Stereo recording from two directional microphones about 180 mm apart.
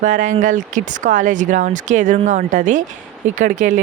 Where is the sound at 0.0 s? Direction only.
45° right (ahead or behind).